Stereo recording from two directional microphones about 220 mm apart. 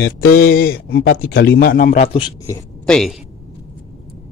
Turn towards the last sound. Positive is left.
turn(degrees=0)  # may be behind; listen again after turning